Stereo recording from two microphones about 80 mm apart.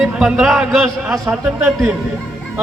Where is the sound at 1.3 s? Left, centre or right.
Right.